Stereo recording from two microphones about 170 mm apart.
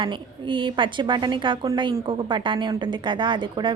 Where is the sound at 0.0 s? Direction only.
30° right (ahead or behind).